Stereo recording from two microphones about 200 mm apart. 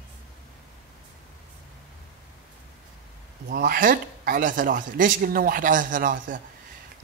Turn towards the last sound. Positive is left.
turn(degrees=-40)  # may be behind; listen again after turning